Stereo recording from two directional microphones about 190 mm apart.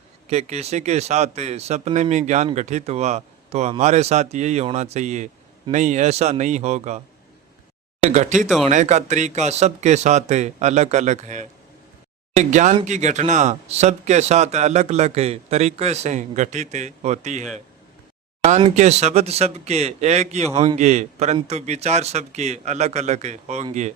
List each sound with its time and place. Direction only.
0.3 s speech: 35° right (ahead or behind)
8.0 s speech: 35° right (ahead or behind)
8.4 s speech: centre (ahead or behind)
8.7 s speech: 40° right (ahead or behind)
18.4 s speech: 35° right (ahead or behind)